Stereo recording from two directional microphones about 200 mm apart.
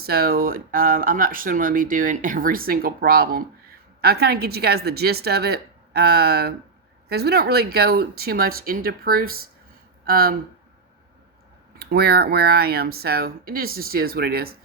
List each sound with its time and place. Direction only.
0.0 s speech: 50° right (ahead or behind)
11.8 s speech: 50° right (ahead or behind)